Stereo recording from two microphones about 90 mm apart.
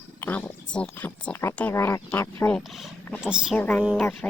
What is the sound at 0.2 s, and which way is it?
Speech, 20° left (ahead or behind).